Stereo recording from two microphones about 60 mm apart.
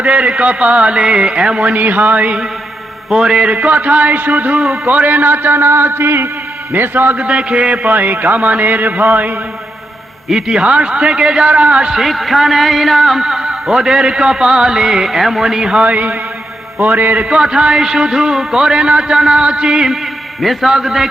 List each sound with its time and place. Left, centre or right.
0.0 s a man's voice: right
7.9 s a man's voice: right
10.2 s a man's voice: centre
12.0 s a man's voice: centre
15.8 s a man's voice: right
17.2 s a man's voice: centre